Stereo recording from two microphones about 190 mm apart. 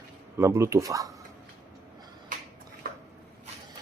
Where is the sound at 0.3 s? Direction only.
15° right (ahead or behind).